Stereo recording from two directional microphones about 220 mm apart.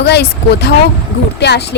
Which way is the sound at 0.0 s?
50° left (ahead or behind).